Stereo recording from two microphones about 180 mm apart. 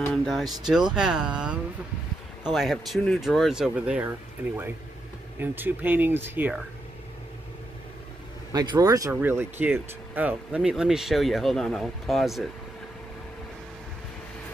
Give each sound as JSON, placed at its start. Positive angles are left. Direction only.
{"t": 0.1, "sound": "speech", "side_deg": 0}
{"t": 5.4, "sound": "speech", "side_deg": -10}
{"t": 8.5, "sound": "speech", "side_deg": -20}